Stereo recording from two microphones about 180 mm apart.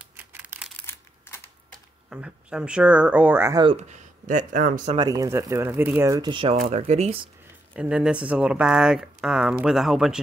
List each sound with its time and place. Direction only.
0.0 s a sound: 10° right (ahead or behind)
0.7 s a sound: 15° left (ahead or behind)
2.0 s speech: 5° right (ahead or behind)
3.6 s speech: 40° right (ahead or behind)
4.9 s speech: 20° right (ahead or behind)
6.5 s speech: 35° right (ahead or behind)
7.7 s speech: 5° right (ahead or behind)